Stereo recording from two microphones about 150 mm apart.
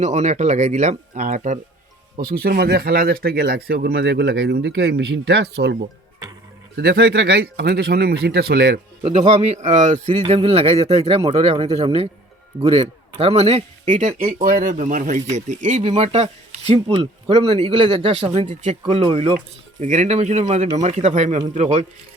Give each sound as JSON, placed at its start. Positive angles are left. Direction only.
{"t": 0.0, "sound": "a man's voice", "side_deg": -50}
{"t": 2.4, "sound": "speech", "side_deg": -90}
{"t": 9.4, "sound": "a man's voice", "side_deg": -45}
{"t": 19.8, "sound": "a man's voice", "side_deg": -50}